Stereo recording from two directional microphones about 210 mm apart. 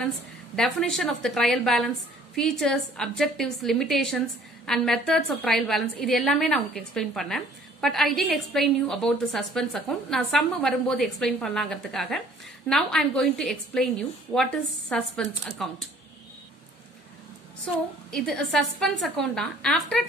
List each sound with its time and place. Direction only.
0.6 s a woman's voice: centre (ahead or behind)
18.1 s a woman's voice: 5° left (ahead or behind)